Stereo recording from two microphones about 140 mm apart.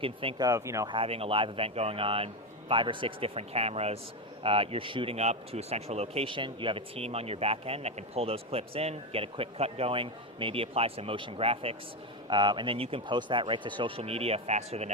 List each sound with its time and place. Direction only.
0.0 s speech: 40° right (ahead or behind)
0.4 s speech: 20° right (ahead or behind)
0.9 s speech: 40° right (ahead or behind)
12.3 s speech: 35° right (ahead or behind); by 14.9 s 55° right (ahead or behind)